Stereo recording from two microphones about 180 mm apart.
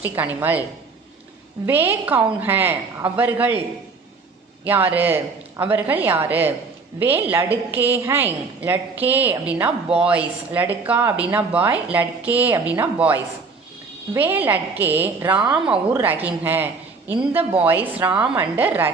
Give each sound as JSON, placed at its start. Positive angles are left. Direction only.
{"t": 0.0, "sound": "a woman's voice", "side_deg": -10}
{"t": 1.6, "sound": "a woman's voice", "side_deg": -10}
{"t": 4.6, "sound": "a woman's voice", "side_deg": -10}